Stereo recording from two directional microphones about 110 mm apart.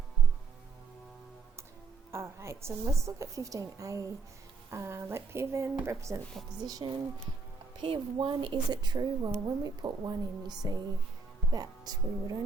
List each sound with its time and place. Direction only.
2.1 s a woman's voice: 25° right (ahead or behind)
6.6 s speech: 35° right (ahead or behind)
7.8 s speech: 50° right (ahead or behind)